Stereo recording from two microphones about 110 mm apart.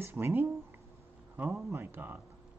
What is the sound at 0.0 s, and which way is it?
Speech, 20° right (ahead or behind).